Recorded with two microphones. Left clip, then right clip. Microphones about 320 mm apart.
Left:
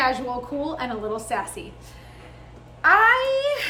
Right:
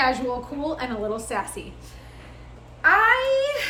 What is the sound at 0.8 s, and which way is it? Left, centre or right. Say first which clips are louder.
Speech: even; centre.